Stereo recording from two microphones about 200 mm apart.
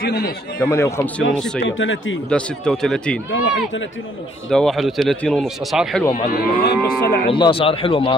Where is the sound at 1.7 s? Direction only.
75° left (ahead or behind).